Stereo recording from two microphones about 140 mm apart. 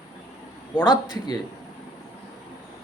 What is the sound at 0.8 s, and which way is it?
Speech, 30° left (ahead or behind).